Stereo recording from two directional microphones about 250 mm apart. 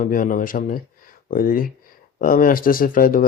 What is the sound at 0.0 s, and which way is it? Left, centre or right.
Speech, left.